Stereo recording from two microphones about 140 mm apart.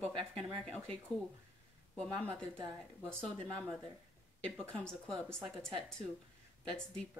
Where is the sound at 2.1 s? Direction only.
15° right (ahead or behind).